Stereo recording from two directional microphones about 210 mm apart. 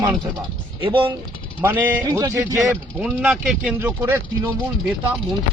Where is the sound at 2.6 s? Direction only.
5° right (ahead or behind).